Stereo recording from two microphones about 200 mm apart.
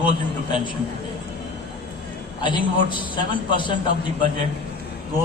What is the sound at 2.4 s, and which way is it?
Speech, 25° left (ahead or behind).